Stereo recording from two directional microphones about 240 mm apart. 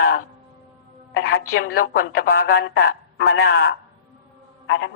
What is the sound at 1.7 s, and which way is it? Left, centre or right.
A woman's voice, left.